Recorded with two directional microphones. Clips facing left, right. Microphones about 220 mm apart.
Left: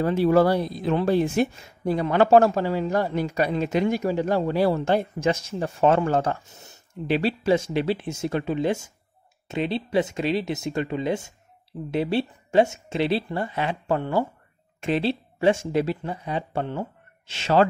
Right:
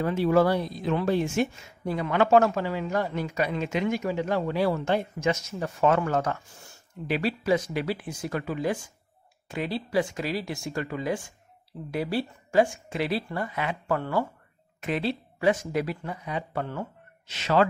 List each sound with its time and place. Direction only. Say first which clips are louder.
0.0 s speech: left 3 dB; 35° left (ahead or behind)